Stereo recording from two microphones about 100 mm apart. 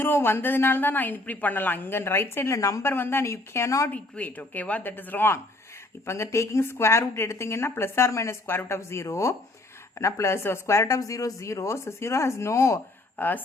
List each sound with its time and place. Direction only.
0.0 s a woman's voice: 20° left (ahead or behind)
2.9 s a woman's voice: 20° left (ahead or behind)
3.8 s a woman's voice: 15° left (ahead or behind); by 12.8 s 30° left (ahead or behind)
13.1 s speech: 20° left (ahead or behind)